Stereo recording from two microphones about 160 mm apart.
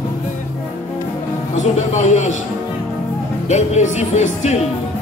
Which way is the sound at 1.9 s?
45° left (ahead or behind).